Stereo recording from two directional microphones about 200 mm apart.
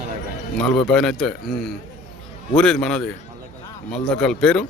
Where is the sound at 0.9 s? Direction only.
Centre (ahead or behind).